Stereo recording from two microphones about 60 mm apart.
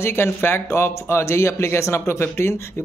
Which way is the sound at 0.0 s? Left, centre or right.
Left.